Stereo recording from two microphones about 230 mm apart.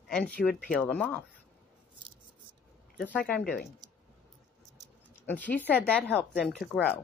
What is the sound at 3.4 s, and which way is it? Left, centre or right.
Speech, left.